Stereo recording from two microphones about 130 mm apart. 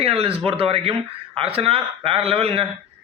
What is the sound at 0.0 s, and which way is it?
Speech, 50° right (ahead or behind).